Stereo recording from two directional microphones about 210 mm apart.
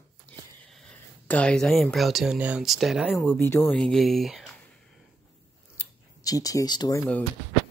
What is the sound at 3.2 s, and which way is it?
Speech, 10° left (ahead or behind).